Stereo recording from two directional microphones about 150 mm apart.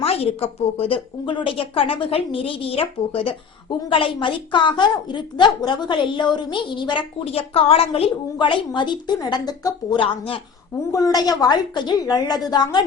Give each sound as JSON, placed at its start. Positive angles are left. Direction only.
{"t": 0.0, "sound": "a woman's voice", "side_deg": 40}
{"t": 10.9, "sound": "a woman's voice", "side_deg": 25}